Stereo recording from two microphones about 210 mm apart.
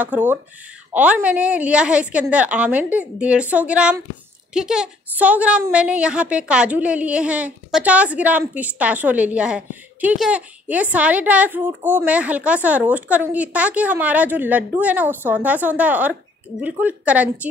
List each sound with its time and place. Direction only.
0.0 s a woman's voice: 10° right (ahead or behind)